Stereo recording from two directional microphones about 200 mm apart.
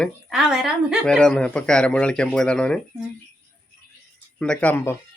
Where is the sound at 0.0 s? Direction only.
Centre (ahead or behind).